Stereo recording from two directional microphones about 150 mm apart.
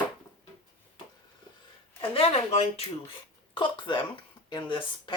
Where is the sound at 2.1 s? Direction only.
40° left (ahead or behind).